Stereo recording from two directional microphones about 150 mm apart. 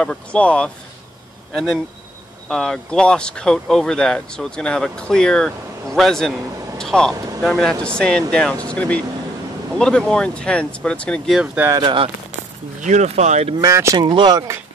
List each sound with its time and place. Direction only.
0.0 s speech: 5° left (ahead or behind)
11.7 s speech: 30° right (ahead or behind)
12.8 s speech: 50° right (ahead or behind)
13.6 s speech: 20° right (ahead or behind)
13.9 s speech: 30° right (ahead or behind)